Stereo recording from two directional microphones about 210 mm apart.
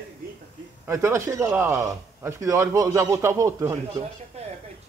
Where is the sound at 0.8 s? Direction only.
15° right (ahead or behind).